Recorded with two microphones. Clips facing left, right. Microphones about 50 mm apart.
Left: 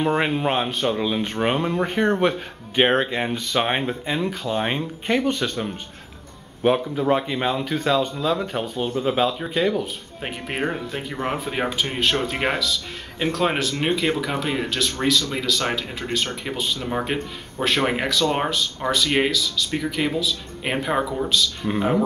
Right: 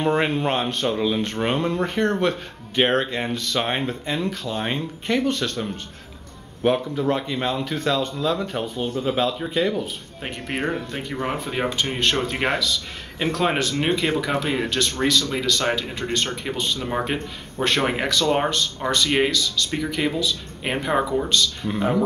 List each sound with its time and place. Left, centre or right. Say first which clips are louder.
0.0 s speech: even; centre